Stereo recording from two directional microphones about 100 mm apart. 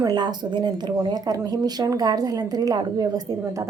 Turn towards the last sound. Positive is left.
turn(degrees=-35)  # may be behind; listen again after turning